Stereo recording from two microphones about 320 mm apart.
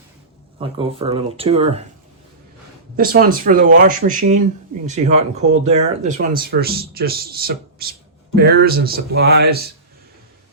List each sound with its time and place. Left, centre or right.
0.6 s speech: centre
2.9 s a man's voice: right